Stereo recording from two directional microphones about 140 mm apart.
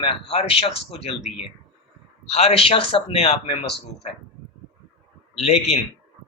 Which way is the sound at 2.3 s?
45° left (ahead or behind).